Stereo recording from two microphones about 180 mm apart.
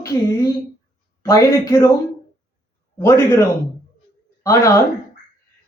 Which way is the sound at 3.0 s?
15° left (ahead or behind).